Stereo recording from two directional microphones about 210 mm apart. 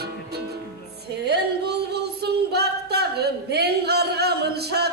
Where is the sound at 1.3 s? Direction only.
50° right (ahead or behind).